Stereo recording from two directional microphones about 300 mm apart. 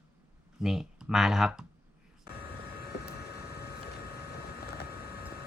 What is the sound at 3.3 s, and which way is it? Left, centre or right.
Vehicle, left.